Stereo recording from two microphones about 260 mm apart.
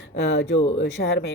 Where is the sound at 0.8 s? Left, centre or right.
Left.